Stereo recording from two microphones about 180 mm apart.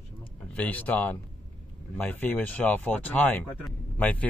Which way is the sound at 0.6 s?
10° left (ahead or behind).